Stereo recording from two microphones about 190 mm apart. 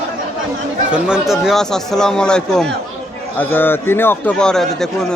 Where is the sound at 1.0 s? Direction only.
5° right (ahead or behind).